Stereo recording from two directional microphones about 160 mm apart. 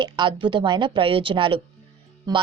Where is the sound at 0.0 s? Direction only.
30° right (ahead or behind).